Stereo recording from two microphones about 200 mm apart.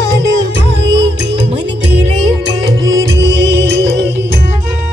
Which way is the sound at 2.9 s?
65° right (ahead or behind).